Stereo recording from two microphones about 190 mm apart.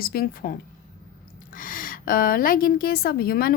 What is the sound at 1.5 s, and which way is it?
A woman's voice, 45° left (ahead or behind).